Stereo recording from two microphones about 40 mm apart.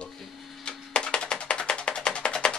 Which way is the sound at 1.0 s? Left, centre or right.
Left.